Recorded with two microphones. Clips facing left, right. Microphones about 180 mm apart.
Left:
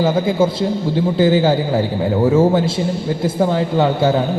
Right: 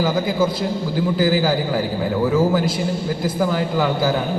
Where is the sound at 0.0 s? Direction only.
25° left (ahead or behind).